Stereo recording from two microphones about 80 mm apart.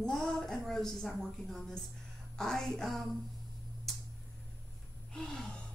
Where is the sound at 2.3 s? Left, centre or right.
Centre.